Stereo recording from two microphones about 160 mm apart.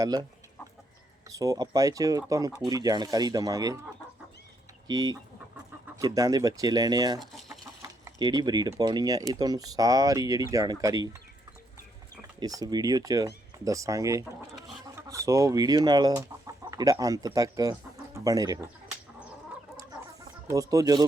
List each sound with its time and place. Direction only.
0.0 s speech: 25° right (ahead or behind)
1.3 s speech: 20° right (ahead or behind)
4.9 s speech: 25° right (ahead or behind)
7.2 s chicken: centre (ahead or behind)
7.6 s speech: 20° right (ahead or behind)
12.4 s speech: 25° right (ahead or behind)
20.5 s speech: 20° right (ahead or behind)